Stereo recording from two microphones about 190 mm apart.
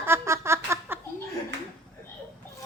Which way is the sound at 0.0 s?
15° right (ahead or behind).